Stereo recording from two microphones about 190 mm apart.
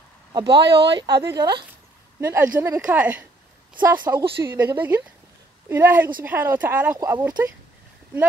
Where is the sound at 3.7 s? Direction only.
25° right (ahead or behind).